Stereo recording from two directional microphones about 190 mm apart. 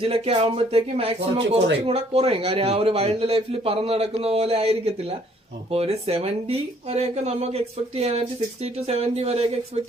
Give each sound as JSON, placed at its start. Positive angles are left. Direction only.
{"t": 0.0, "sound": "speech", "side_deg": -30}